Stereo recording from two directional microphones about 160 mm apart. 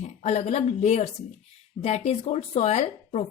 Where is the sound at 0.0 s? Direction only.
45° left (ahead or behind).